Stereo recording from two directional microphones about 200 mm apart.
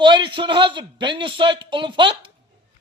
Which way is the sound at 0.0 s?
25° right (ahead or behind).